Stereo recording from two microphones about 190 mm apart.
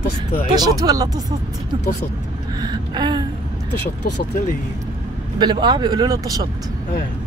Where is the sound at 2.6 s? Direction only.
20° right (ahead or behind).